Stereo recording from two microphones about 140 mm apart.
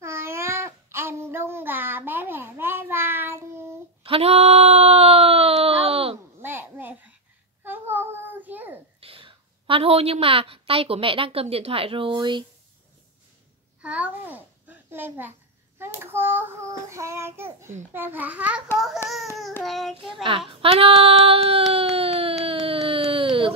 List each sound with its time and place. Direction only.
0.0 s babbling: 20° right (ahead or behind)
4.0 s a sound: 45° right (ahead or behind)
6.4 s a sound: 15° right (ahead or behind)
7.6 s child singing: 15° right (ahead or behind)
9.0 s a woman's voice: 40° right (ahead or behind)
13.7 s a child's voice: 10° right (ahead or behind)
15.8 s child singing: 15° right (ahead or behind)
19.6 s child singing: centre (ahead or behind)
20.2 s speech: 40° right (ahead or behind)